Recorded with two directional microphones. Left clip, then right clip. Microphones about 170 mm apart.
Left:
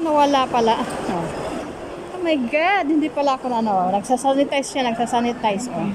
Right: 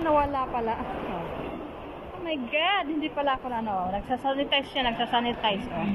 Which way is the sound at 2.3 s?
25° left (ahead or behind).